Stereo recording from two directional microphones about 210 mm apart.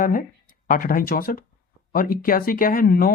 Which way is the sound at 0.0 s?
40° left (ahead or behind).